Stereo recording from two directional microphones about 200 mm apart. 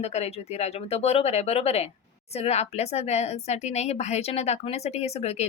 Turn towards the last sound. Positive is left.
turn(degrees=30)  # may be behind; listen again after turning